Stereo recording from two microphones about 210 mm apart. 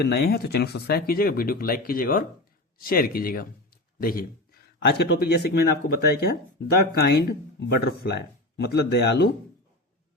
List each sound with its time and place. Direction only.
0.0 s speech: 50° left (ahead or behind)